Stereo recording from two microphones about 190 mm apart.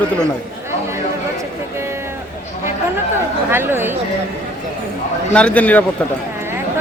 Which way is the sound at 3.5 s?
10° right (ahead or behind).